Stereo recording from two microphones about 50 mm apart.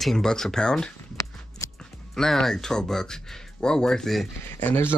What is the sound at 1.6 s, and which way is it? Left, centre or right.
Music, left.